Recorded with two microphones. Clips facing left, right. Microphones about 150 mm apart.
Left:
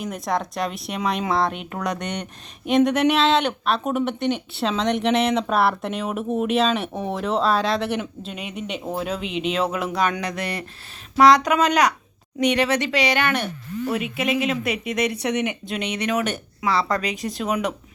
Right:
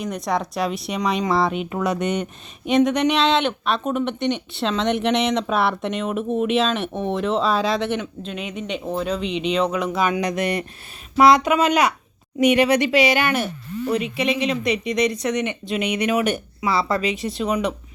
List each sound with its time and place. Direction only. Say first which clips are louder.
0.0 s speech: right 1 dB; centre (ahead or behind)
10.2 s speech: right 6 dB; 15° right (ahead or behind); by 15.5 s 10° left (ahead or behind)
15.7 s speech: right 5 dB; 10° right (ahead or behind)